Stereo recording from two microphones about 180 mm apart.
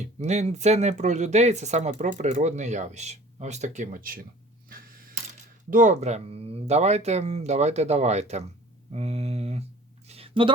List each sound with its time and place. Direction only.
0.0 s speech: 40° right (ahead or behind)
5.7 s speech: 40° right (ahead or behind)
10.1 s a sound: 30° right (ahead or behind)